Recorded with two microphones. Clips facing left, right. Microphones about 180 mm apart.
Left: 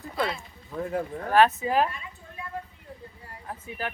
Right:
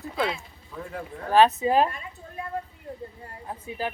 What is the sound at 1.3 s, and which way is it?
Speech, 20° right (ahead or behind).